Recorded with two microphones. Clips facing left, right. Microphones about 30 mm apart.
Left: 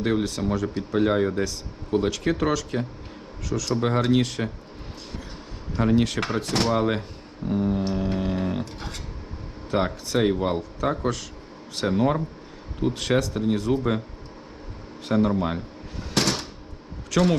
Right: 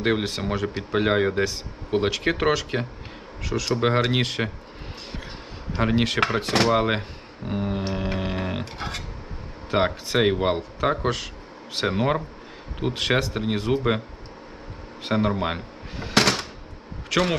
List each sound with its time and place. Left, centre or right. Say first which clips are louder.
0.0 s speech: even; right
5.7 s speech: left 1 dB; right
7.4 s a sound: left 3 dB; right
8.6 s speech: right 4 dB; right
9.7 s speech: right 2 dB; right
15.0 s a sound: left 1 dB; right
17.1 s speech: left 1 dB; right